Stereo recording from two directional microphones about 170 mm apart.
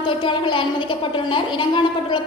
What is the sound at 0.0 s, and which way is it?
A woman's voice, 30° left (ahead or behind).